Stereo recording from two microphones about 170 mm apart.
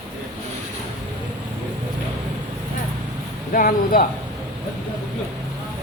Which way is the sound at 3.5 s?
55° left (ahead or behind).